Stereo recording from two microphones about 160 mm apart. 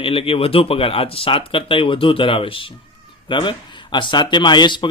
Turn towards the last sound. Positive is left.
turn(degrees=30)  # may be behind; listen again after turning